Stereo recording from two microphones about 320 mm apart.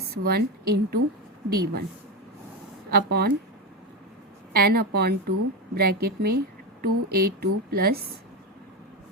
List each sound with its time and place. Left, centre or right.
0.1 s a woman's voice: right
2.9 s a woman's voice: right
4.5 s a woman's voice: right